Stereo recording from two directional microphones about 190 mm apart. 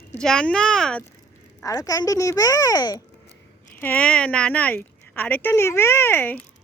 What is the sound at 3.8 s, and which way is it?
Speech, 5° left (ahead or behind).